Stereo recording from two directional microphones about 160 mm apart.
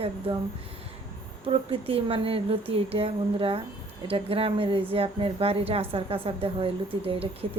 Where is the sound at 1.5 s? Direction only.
35° right (ahead or behind).